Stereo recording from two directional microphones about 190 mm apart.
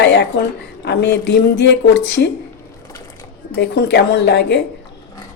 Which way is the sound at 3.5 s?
65° left (ahead or behind).